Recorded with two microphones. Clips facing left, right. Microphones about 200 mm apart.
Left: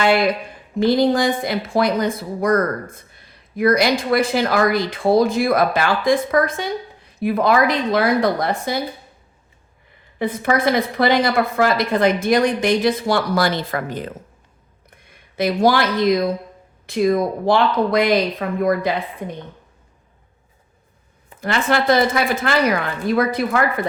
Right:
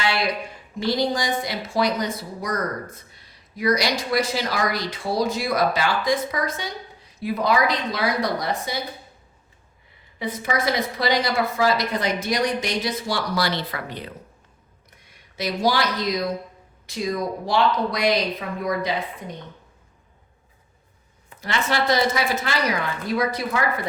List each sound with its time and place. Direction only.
0.0 s a woman's voice: 50° left (ahead or behind)
10.2 s a woman's voice: 55° left (ahead or behind)
14.8 s a sound: 55° left (ahead or behind)
16.8 s speech: 55° left (ahead or behind)
21.4 s a woman's voice: 55° left (ahead or behind)